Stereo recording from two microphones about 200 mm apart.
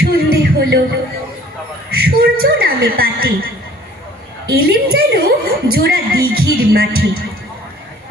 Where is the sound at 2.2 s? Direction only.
50° right (ahead or behind).